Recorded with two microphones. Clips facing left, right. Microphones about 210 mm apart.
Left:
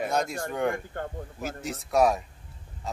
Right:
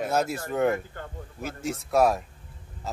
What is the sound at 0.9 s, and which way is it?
Speech, 45° left (ahead or behind).